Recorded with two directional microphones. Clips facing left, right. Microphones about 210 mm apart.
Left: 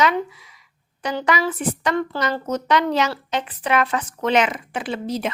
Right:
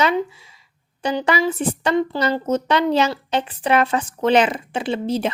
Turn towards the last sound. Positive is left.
turn(degrees=-25)  # may be behind; listen again after turning